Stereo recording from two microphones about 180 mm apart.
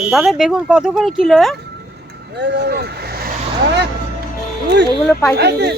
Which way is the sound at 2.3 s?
75° right (ahead or behind).